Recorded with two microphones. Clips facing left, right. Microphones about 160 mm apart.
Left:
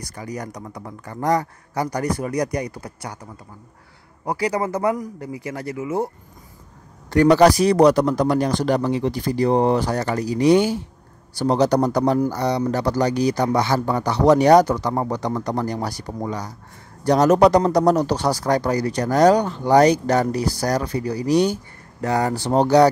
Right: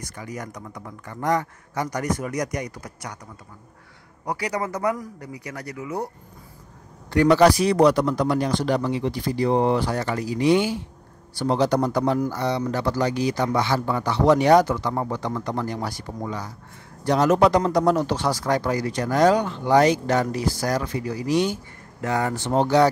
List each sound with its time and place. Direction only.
0.0 s speech: 35° left (ahead or behind)
4.3 s speech: 30° left (ahead or behind)
7.1 s speech: 40° left (ahead or behind)